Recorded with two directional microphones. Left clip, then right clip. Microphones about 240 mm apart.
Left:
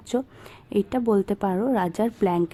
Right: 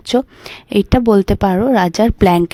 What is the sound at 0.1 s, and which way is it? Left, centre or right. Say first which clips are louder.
A woman's voice: right 11 dB; right.